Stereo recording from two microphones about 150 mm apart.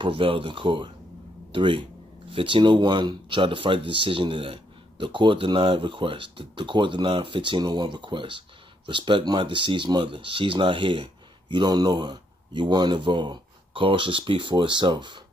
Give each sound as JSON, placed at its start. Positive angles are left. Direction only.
{"t": 0.0, "sound": "speech", "side_deg": -35}